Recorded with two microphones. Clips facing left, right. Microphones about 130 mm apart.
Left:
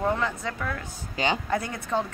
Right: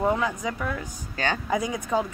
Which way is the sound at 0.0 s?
10° right (ahead or behind).